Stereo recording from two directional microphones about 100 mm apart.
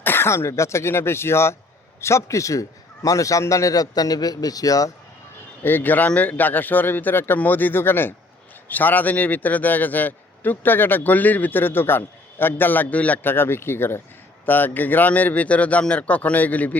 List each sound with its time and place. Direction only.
0.0 s a man's voice: 25° left (ahead or behind)
5.6 s a man's voice: 20° left (ahead or behind)